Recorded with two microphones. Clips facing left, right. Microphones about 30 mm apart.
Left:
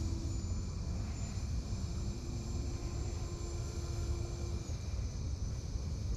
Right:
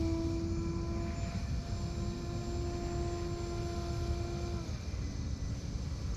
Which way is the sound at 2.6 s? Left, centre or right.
Right.